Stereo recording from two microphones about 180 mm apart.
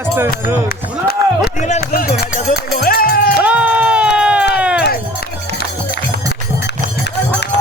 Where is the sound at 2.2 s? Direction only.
55° left (ahead or behind).